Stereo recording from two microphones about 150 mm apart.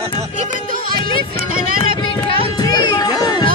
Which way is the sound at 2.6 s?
25° left (ahead or behind).